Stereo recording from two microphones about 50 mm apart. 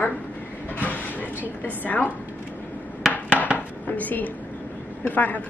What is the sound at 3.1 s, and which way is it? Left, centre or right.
Dishes, left.